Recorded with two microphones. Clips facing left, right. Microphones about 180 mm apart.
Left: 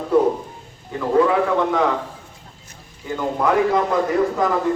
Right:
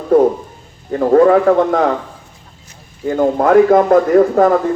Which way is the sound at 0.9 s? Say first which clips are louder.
Right 7 dB; 50° right (ahead or behind).